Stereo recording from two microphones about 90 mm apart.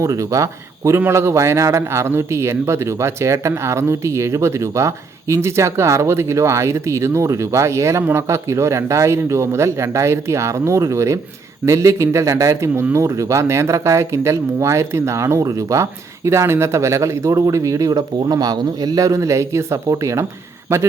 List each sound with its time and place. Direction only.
0.0 s speech: 40° right (ahead or behind)